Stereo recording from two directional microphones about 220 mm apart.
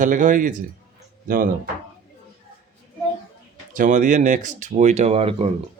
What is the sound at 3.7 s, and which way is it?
A man's voice, 35° right (ahead or behind).